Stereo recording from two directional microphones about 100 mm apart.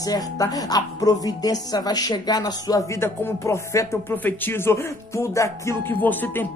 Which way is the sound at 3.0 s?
25° left (ahead or behind).